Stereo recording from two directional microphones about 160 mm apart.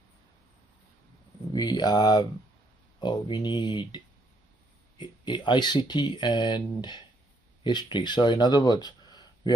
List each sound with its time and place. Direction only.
1.5 s speech: 25° left (ahead or behind)